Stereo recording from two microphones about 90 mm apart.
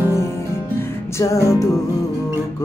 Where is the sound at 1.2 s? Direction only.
35° left (ahead or behind).